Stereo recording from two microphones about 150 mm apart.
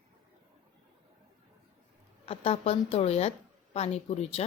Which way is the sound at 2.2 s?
40° left (ahead or behind).